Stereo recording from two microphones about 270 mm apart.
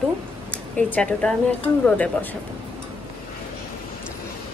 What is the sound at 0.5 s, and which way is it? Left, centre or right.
Speech, centre.